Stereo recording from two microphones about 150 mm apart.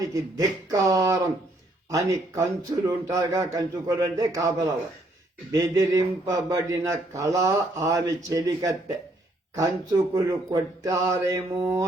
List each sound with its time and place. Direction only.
0.0 s speech: 25° right (ahead or behind)
10.2 s speech: 25° right (ahead or behind)